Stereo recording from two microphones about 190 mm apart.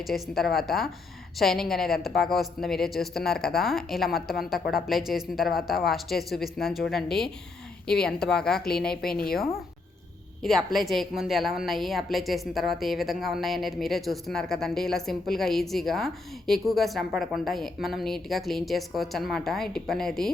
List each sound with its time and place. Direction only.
0.0 s a woman's voice: centre (ahead or behind)
9.1 s speech: 50° left (ahead or behind)
10.4 s a woman's voice: centre (ahead or behind)